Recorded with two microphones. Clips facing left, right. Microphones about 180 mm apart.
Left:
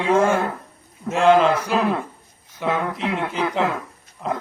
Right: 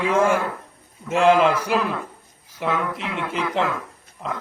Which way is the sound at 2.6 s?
30° left (ahead or behind).